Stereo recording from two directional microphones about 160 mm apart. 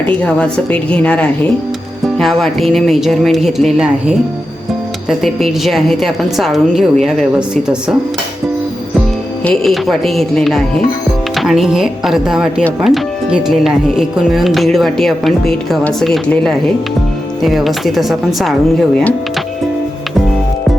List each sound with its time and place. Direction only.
0.0 s a woman's voice: 10° left (ahead or behind)
5.0 s speech: centre (ahead or behind)
9.4 s speech: 5° left (ahead or behind)